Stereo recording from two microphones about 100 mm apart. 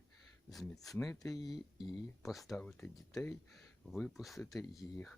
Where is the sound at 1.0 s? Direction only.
35° left (ahead or behind).